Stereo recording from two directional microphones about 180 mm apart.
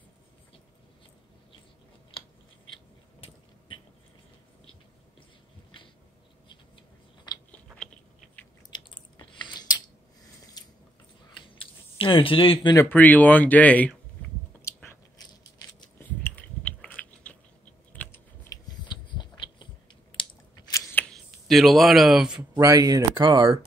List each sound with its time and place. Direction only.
2.1 s scissors: 30° left (ahead or behind)
7.3 s biting: 25° left (ahead or behind)
8.6 s chewing: 25° left (ahead or behind)
10.6 s water: 20° left (ahead or behind)
11.4 s a sound: 30° left (ahead or behind)
12.7 s speech: 10° left (ahead or behind)
14.6 s biting: 15° left (ahead or behind)
16.1 s biting: 10° left (ahead or behind)
17.9 s typing: 10° left (ahead or behind)
20.2 s a sound: 20° left (ahead or behind); by 22.5 s 5° right (ahead or behind)
22.5 s speech: 20° right (ahead or behind)